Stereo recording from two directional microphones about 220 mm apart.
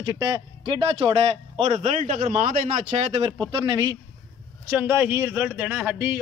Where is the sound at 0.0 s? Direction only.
15° right (ahead or behind).